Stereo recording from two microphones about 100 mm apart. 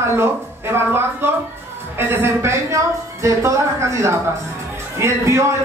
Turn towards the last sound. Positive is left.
turn(degrees=-30)  # may be behind; listen again after turning